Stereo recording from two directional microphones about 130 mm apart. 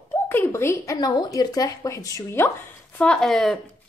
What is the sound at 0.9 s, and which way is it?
Speech, 30° left (ahead or behind).